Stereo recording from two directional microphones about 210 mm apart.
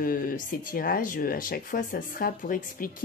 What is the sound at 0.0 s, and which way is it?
Speech, 40° left (ahead or behind).